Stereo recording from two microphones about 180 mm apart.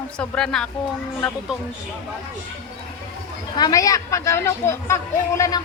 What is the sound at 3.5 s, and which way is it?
Speech, 20° left (ahead or behind).